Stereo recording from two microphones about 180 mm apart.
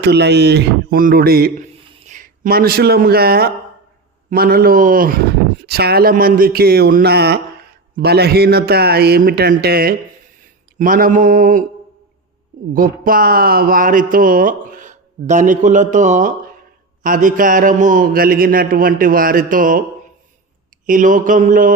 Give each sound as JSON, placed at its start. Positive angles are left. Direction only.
{"t": 0.0, "sound": "speech", "side_deg": -70}
{"t": 2.0, "sound": "speech", "side_deg": -45}
{"t": 12.7, "sound": "speech", "side_deg": -50}
{"t": 20.8, "sound": "speech", "side_deg": -45}